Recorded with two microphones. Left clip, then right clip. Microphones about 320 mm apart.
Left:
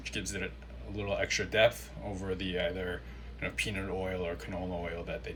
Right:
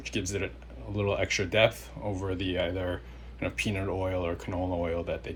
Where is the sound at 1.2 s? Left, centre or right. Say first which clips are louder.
Right 1 dB; centre.